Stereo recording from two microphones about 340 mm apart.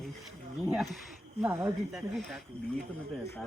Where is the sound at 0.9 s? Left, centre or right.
Centre.